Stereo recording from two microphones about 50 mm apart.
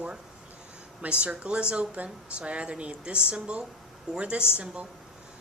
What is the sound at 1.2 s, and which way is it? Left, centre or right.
Speech, right.